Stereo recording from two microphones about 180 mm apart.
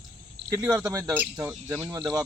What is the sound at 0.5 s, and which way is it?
Speech, 10° right (ahead or behind).